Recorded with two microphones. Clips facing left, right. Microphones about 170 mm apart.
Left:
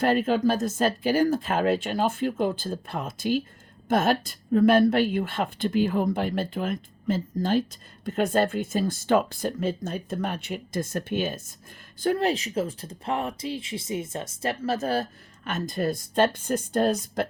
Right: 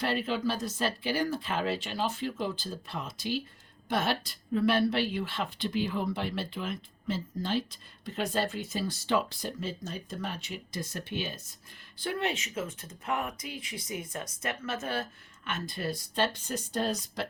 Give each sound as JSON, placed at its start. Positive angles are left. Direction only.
{"t": 0.0, "sound": "speech", "side_deg": 45}